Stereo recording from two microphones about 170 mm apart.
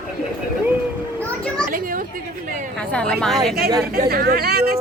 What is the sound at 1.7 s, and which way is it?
Speech, 55° right (ahead or behind).